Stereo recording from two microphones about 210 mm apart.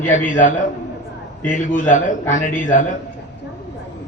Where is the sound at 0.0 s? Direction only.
35° left (ahead or behind).